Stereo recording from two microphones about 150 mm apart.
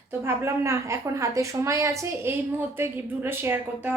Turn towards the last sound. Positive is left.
turn(degrees=-15)  # may be behind; listen again after turning